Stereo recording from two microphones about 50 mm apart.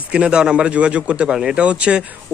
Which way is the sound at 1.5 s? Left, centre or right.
Right.